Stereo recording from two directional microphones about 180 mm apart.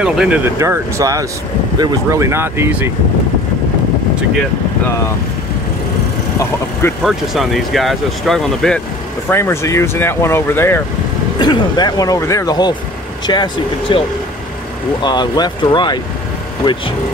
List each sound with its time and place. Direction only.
0.0 s speech: 5° right (ahead or behind)
0.6 s speech: 15° right (ahead or behind)
7.1 s speech: centre (ahead or behind)
9.3 s speech: 15° left (ahead or behind)
11.3 s speech: 25° left (ahead or behind)